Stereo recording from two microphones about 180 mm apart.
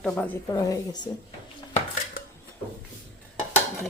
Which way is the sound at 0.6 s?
20° left (ahead or behind).